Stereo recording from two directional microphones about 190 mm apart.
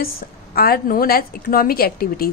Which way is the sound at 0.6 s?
50° left (ahead or behind).